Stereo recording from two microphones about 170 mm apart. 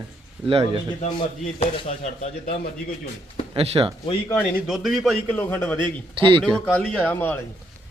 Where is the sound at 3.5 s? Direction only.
35° right (ahead or behind).